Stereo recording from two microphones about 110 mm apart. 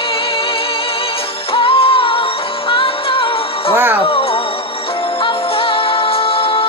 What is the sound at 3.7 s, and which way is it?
Music, 20° right (ahead or behind).